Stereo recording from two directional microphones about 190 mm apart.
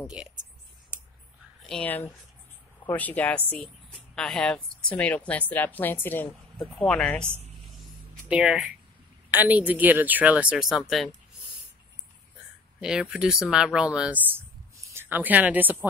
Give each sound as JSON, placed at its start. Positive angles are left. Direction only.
{"t": 0.0, "sound": "speech", "side_deg": -5}
{"t": 1.7, "sound": "speech", "side_deg": 10}
{"t": 8.3, "sound": "speech", "side_deg": -5}
{"t": 12.8, "sound": "speech", "side_deg": 0}